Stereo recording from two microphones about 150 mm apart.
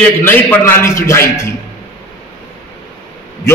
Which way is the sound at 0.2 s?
15° left (ahead or behind).